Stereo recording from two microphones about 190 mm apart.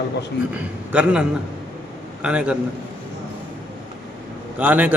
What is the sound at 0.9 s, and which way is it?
A man's voice, 5° right (ahead or behind).